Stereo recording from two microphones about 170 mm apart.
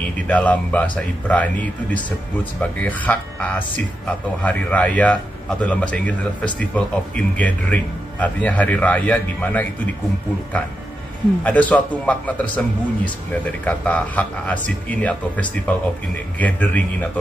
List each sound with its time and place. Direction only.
0.3 s speech: 10° left (ahead or behind)
11.4 s speech: 10° left (ahead or behind)